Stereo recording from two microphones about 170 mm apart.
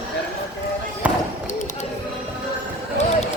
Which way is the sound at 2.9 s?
40° left (ahead or behind).